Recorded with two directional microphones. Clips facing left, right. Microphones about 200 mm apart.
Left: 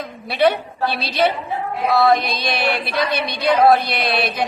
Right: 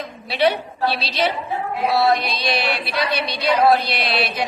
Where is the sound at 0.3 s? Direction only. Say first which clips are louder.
Left 2 dB; 50° left (ahead or behind).